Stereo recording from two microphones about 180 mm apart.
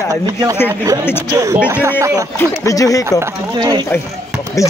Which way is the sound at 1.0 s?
10° left (ahead or behind).